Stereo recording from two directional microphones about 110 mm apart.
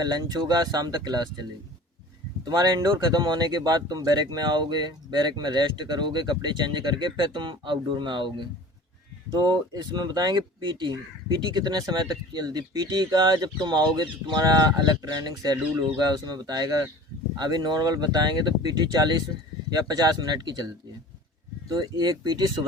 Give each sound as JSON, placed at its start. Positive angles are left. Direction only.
{"t": 0.0, "sound": "speech", "side_deg": -40}
{"t": 21.7, "sound": "speech", "side_deg": -40}